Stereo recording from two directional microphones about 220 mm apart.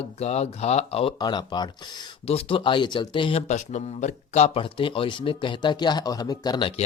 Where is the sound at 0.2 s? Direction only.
30° left (ahead or behind).